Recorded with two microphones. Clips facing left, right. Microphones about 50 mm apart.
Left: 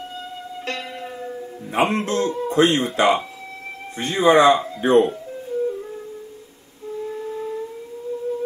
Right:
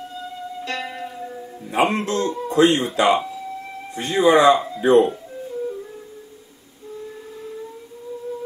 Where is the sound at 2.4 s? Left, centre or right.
Left.